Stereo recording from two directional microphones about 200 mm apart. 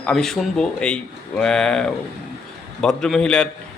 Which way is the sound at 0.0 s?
Centre (ahead or behind).